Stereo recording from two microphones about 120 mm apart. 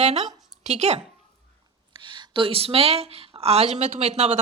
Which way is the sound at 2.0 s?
45° right (ahead or behind).